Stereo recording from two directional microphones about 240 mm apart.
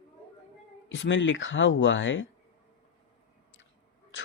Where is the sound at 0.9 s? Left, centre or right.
Left.